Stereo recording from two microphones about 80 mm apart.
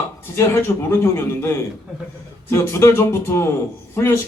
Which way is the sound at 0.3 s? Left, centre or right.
Left.